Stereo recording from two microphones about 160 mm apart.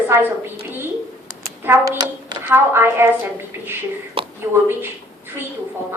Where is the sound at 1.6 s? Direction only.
15° right (ahead or behind).